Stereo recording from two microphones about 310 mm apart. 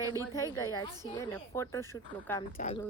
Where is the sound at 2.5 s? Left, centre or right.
Left.